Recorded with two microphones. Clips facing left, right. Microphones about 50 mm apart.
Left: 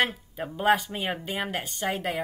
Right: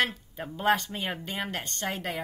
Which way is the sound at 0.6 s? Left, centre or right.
Centre.